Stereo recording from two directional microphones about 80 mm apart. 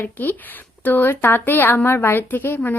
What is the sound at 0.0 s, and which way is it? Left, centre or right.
Speech, left.